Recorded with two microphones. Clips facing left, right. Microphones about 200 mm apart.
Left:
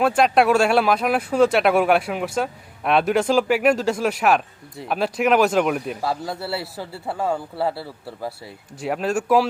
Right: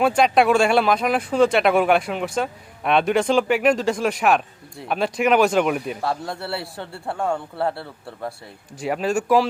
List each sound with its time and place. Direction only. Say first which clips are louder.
0.0 s speech: even; centre (ahead or behind)